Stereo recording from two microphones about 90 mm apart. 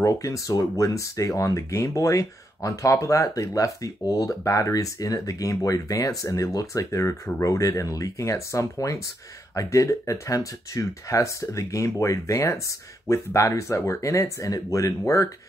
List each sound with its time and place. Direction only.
0.0 s speech: 40° left (ahead or behind)